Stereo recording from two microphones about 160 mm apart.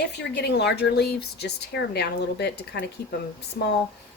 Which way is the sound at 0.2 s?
90° left.